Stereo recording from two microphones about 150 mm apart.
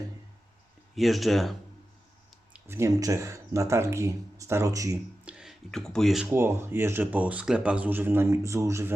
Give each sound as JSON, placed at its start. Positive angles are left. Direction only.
{"t": 0.9, "sound": "speech", "side_deg": 0}
{"t": 2.5, "sound": "speech", "side_deg": -15}
{"t": 5.2, "sound": "a sound", "side_deg": -5}
{"t": 6.3, "sound": "speech", "side_deg": -15}